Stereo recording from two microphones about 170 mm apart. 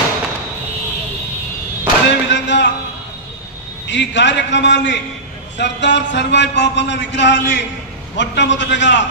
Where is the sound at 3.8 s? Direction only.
90° left.